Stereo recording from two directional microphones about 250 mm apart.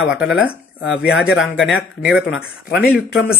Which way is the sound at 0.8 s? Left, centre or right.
Left.